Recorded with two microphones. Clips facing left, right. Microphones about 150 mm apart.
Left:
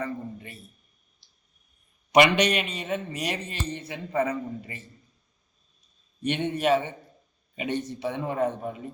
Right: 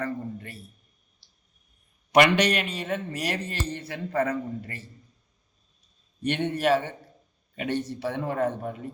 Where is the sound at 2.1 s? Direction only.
15° left (ahead or behind).